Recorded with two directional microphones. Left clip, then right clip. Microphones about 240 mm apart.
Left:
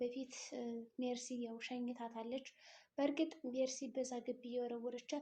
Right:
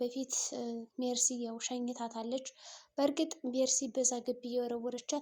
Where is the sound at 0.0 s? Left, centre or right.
Right.